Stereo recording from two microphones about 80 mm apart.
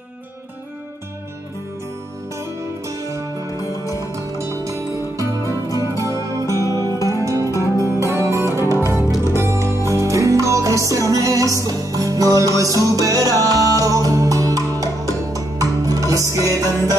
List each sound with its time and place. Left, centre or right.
3.5 s music: left
4.5 s music: right
5.7 s music: left
6.0 s music: right
6.8 s music: left
7.2 s music: right
7.5 s music: left
8.1 s music: right